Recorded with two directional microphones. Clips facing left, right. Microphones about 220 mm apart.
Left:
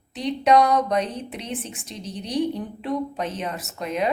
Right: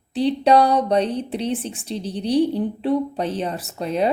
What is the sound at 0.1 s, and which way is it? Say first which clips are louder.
A woman's voice: right 3 dB; 30° right (ahead or behind).